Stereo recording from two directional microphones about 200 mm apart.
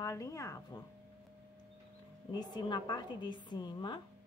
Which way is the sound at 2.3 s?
20° left (ahead or behind).